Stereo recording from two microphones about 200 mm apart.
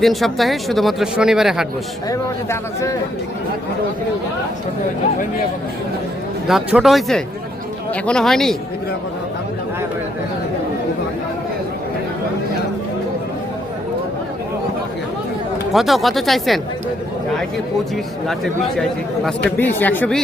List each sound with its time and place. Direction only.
0.0 s speech: centre (ahead or behind)
2.0 s speech: 15° left (ahead or behind)
6.5 s speech: 5° right (ahead or behind)
15.7 s speech: centre (ahead or behind)
17.9 s speech: centre (ahead or behind)